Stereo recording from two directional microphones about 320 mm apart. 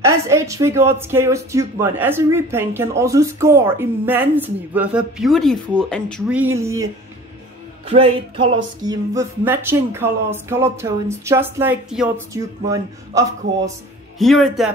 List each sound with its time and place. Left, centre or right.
0.0 s a woman's voice: centre
7.9 s a woman's voice: centre
13.7 s a woman's voice: centre